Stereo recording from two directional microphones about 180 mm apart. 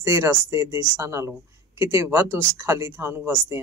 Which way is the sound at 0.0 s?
15° right (ahead or behind).